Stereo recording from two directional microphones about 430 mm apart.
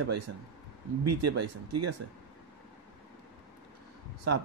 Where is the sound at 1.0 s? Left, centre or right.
Right.